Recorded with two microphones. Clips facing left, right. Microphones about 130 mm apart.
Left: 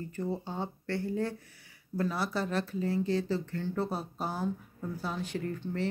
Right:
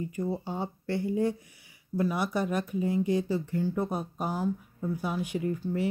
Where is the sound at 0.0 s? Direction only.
10° right (ahead or behind).